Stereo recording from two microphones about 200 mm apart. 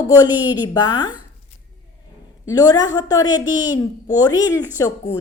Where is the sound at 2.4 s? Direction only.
15° left (ahead or behind).